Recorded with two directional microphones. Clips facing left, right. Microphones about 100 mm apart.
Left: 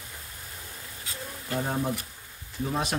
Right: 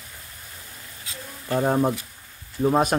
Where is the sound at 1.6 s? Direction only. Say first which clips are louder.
Right 9 dB; 55° right (ahead or behind).